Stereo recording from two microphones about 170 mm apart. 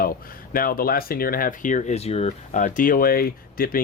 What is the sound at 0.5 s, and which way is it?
Speech, 60° left (ahead or behind).